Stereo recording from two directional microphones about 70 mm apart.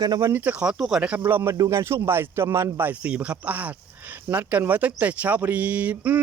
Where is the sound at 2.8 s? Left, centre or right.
Right.